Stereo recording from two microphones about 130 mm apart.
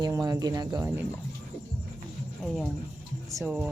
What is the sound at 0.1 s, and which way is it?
Speech, 30° right (ahead or behind).